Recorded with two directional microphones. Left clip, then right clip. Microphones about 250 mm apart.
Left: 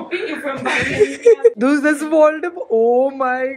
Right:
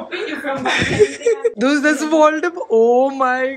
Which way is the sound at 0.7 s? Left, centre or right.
Centre.